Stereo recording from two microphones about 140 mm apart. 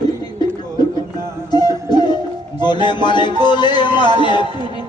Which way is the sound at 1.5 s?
30° left (ahead or behind).